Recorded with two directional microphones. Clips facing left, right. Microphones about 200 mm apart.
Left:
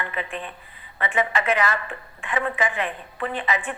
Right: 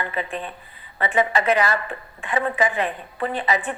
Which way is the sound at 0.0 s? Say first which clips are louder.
Right 3 dB; 35° right (ahead or behind).